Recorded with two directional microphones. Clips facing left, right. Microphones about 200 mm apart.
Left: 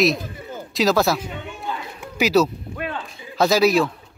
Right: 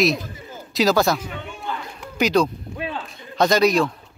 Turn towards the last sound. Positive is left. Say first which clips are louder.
# even
turn(degrees=5)  # may be behind; listen again after turning